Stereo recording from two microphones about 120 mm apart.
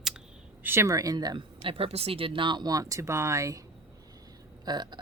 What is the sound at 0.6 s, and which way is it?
Speech, 20° right (ahead or behind).